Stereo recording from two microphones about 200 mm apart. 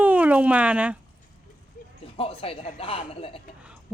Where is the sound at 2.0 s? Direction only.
30° left (ahead or behind).